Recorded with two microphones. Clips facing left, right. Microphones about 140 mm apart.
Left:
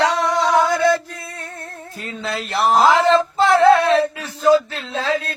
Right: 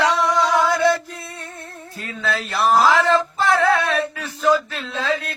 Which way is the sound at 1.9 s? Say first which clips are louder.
Right 1 dB; 20° left (ahead or behind).